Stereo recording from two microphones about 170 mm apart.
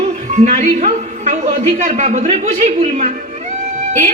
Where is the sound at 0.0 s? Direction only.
45° right (ahead or behind).